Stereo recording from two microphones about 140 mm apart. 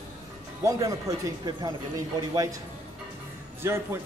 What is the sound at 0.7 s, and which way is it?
Speech, 25° right (ahead or behind).